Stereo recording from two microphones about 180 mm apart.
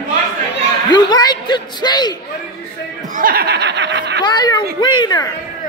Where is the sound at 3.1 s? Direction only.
50° right (ahead or behind); by 4.2 s 75° right (ahead or behind).